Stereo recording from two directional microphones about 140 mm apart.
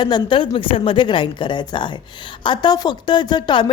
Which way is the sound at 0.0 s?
35° left (ahead or behind).